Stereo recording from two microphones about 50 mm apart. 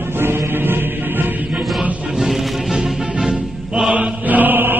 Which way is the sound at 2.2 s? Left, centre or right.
Centre.